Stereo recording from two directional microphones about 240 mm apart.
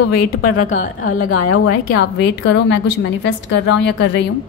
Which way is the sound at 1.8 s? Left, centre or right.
Left.